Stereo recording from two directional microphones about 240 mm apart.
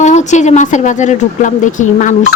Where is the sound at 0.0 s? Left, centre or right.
Left.